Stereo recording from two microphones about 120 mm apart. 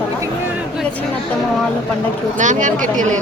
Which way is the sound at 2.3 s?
90° right.